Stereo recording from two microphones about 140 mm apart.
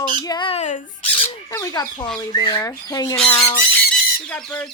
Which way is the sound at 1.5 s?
25° left (ahead or behind).